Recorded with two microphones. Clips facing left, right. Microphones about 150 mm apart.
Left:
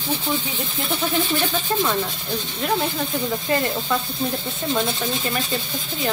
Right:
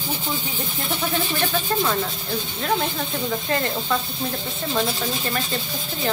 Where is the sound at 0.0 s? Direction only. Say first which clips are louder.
Left 3 dB; 10° right (ahead or behind).